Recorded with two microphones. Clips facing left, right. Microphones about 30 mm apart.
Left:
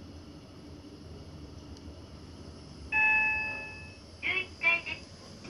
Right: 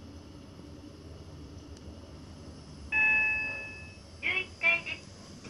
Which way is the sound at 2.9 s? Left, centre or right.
Centre.